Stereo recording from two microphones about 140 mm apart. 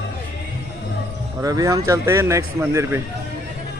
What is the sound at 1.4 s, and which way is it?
A man's voice, 25° right (ahead or behind).